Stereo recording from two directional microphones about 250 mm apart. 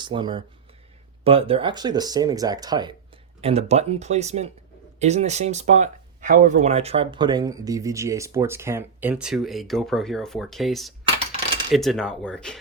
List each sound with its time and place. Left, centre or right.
0.0 s speech: centre